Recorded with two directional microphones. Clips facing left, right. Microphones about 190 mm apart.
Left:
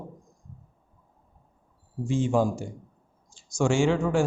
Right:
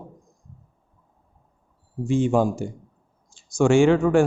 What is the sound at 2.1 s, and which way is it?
Speech, 60° right (ahead or behind).